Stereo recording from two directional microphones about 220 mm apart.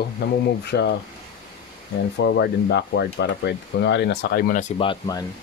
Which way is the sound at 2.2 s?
50° left (ahead or behind).